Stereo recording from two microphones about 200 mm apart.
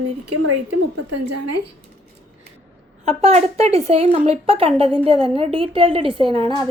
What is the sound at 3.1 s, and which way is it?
A woman's voice, 30° right (ahead or behind).